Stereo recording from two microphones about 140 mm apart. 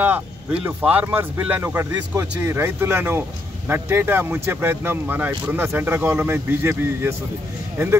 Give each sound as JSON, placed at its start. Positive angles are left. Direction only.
{"t": 0.0, "sound": "speech", "side_deg": -10}